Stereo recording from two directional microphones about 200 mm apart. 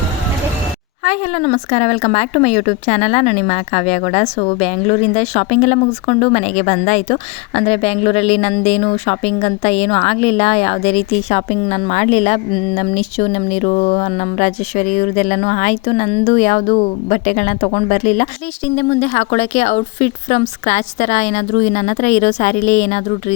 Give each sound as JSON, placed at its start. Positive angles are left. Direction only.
{"t": 1.0, "sound": "speech", "side_deg": 35}